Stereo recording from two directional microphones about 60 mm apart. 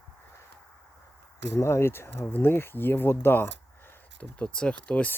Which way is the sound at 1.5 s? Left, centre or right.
Left.